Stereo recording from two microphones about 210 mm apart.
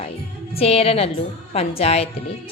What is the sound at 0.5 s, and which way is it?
A woman's voice, 30° left (ahead or behind).